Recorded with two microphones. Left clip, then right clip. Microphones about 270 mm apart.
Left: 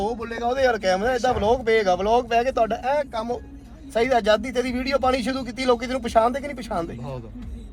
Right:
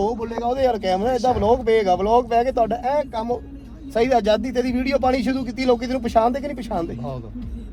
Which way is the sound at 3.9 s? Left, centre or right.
Centre.